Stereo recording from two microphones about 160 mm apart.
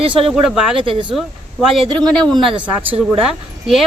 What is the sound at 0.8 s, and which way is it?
Speech, 35° right (ahead or behind).